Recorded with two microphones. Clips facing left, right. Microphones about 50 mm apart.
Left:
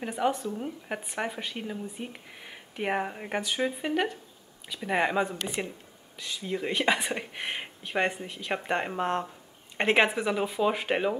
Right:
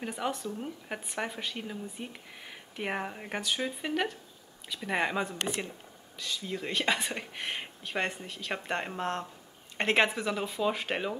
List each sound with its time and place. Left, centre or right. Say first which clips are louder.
0.0 s a woman's voice: left 5 dB; centre